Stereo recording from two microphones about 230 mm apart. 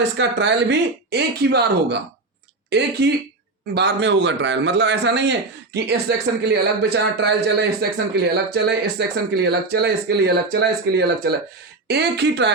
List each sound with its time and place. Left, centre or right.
0.2 s speech: right